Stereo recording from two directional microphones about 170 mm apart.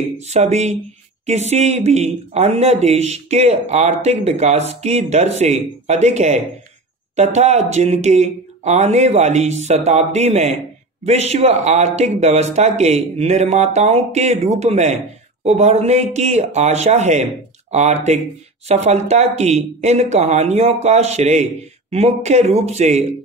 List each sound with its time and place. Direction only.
0.2 s speech: 40° right (ahead or behind)